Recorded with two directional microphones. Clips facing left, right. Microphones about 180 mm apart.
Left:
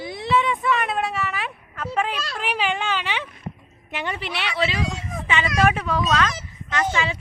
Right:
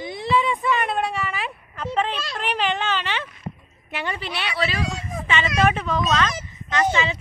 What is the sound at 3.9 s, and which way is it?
Speech, 15° left (ahead or behind).